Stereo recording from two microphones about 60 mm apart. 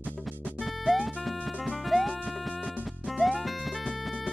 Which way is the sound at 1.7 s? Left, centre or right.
Centre.